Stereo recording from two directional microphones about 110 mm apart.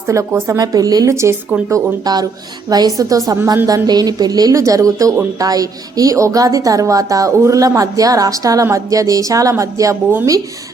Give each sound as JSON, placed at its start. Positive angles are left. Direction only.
{"t": 0.1, "sound": "speech", "side_deg": -30}
{"t": 1.7, "sound": "a woman's voice", "side_deg": -35}